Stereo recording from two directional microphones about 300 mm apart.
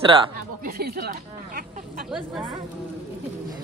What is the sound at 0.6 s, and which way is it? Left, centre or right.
Speech, right.